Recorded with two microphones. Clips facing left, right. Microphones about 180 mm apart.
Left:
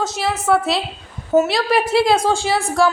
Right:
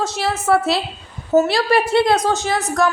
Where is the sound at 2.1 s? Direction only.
30° left (ahead or behind).